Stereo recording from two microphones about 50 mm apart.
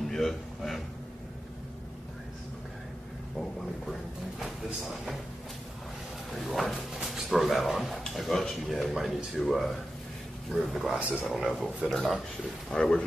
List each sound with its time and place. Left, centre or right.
0.0 s a sound: centre
6.3 s music: centre
6.7 s drawer open or close: centre
8.1 s speech: centre
11.0 s speech: right
11.2 s speech: centre